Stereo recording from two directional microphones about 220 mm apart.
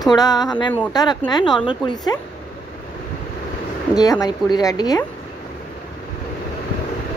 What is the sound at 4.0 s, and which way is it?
A woman's voice, 15° left (ahead or behind).